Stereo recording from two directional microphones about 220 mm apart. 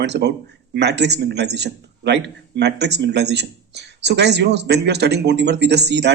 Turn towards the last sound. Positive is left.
turn(degrees=-50)  # may be behind; listen again after turning